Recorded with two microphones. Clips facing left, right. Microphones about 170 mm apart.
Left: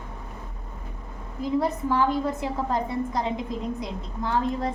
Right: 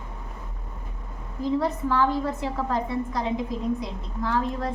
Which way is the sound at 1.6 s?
15° left (ahead or behind).